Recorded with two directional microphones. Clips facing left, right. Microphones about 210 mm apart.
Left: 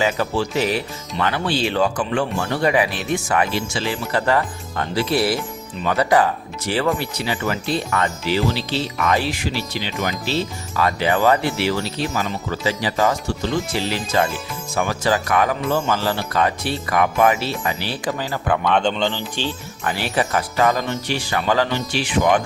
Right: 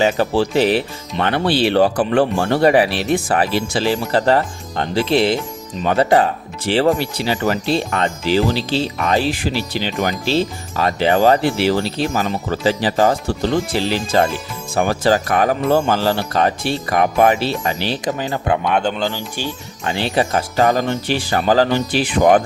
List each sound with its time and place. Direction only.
0.0 s speech: 30° right (ahead or behind)
1.3 s speech: 60° right (ahead or behind); by 2.8 s 35° right (ahead or behind)
2.9 s speech: 70° right (ahead or behind)
3.2 s speech: 35° right (ahead or behind)
17.8 s speech: 20° right (ahead or behind)
18.7 s speech: 5° right (ahead or behind)
19.8 s speech: 25° right (ahead or behind)